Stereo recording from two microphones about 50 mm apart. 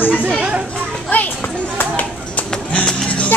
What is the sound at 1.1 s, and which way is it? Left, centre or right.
Children playing, left.